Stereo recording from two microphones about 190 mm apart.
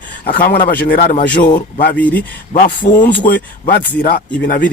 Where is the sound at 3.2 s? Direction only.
55° left (ahead or behind).